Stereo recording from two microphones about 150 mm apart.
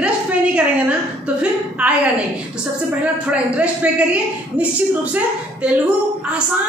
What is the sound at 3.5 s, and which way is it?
Speech, 10° right (ahead or behind).